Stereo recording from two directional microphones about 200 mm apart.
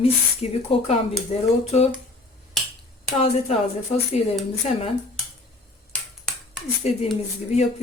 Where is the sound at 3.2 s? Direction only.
30° left (ahead or behind).